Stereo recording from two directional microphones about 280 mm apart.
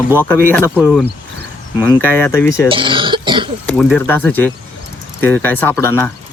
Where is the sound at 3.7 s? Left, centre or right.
Centre.